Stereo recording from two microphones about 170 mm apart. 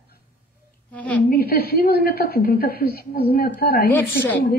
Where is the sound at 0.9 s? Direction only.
10° left (ahead or behind).